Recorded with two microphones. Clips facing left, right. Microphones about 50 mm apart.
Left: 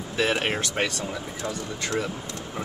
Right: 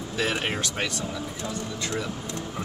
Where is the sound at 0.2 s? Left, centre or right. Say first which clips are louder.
Left 3 dB; left.